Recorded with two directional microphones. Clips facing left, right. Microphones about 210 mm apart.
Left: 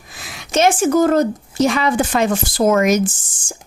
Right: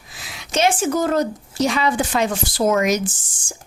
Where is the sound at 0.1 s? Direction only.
50° left (ahead or behind).